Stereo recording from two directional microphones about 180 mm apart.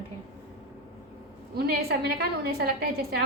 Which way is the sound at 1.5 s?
60° right (ahead or behind).